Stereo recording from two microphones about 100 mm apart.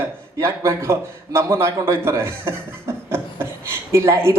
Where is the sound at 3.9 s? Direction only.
30° right (ahead or behind).